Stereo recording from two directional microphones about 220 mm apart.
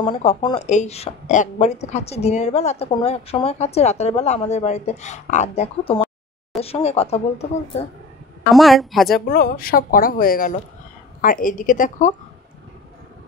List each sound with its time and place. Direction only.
0.0 s a woman's voice: 25° left (ahead or behind)
8.5 s a woman's voice: centre (ahead or behind)
9.1 s a woman's voice: 40° left (ahead or behind)